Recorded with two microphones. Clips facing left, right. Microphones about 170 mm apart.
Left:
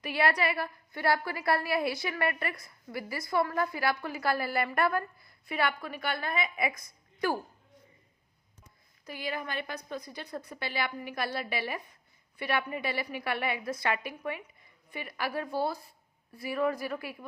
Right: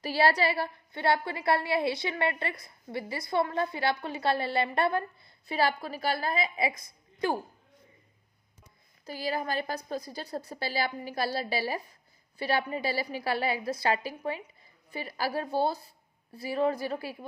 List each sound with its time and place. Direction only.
0.0 s a woman's voice: 30° right (ahead or behind)
9.0 s a woman's voice: 35° right (ahead or behind)